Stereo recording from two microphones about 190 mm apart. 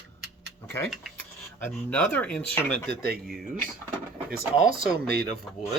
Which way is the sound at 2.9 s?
55° right (ahead or behind).